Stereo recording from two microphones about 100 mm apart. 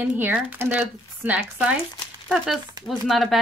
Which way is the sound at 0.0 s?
20° right (ahead or behind).